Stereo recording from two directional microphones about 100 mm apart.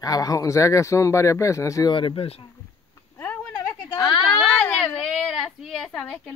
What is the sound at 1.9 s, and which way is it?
Speech, 60° left (ahead or behind).